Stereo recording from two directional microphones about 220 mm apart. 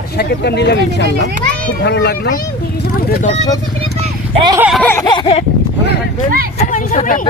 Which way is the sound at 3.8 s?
20° right (ahead or behind).